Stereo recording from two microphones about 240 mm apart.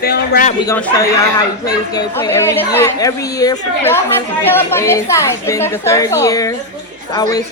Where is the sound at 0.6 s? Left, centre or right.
Centre.